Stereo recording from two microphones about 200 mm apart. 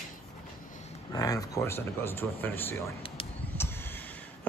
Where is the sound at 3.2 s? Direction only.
25° left (ahead or behind).